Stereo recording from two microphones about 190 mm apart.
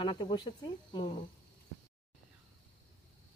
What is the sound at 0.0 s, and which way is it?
Speech, 25° left (ahead or behind).